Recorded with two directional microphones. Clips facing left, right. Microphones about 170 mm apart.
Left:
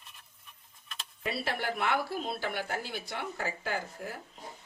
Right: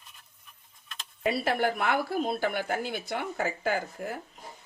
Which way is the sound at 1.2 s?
50° right (ahead or behind).